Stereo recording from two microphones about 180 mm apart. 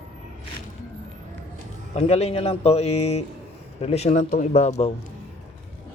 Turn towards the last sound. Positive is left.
turn(degrees=35)  # may be behind; listen again after turning